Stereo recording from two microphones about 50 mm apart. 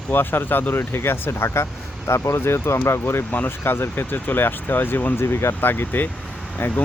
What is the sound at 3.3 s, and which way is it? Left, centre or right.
Speech, left.